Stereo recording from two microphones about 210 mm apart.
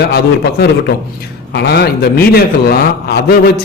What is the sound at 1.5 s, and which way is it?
A man's voice, 50° left (ahead or behind).